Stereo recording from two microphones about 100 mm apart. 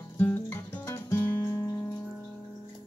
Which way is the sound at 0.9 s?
25° left (ahead or behind).